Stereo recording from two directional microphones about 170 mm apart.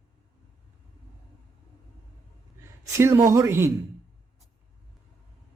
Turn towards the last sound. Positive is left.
turn(degrees=-15)  # may be behind; listen again after turning